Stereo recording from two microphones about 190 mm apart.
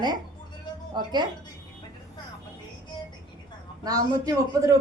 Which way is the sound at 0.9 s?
25° right (ahead or behind).